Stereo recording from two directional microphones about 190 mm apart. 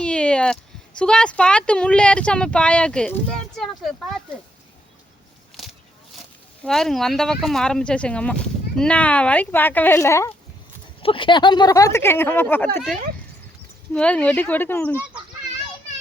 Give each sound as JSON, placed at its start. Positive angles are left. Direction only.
{"t": 0.0, "sound": "speech", "side_deg": 5}
{"t": 6.7, "sound": "speech", "side_deg": 0}
{"t": 11.0, "sound": "speech", "side_deg": 25}
{"t": 13.9, "sound": "speech", "side_deg": 5}